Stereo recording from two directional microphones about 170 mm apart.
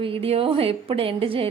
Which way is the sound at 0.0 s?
30° right (ahead or behind).